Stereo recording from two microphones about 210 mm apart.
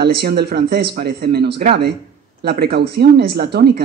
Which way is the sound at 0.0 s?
50° right (ahead or behind).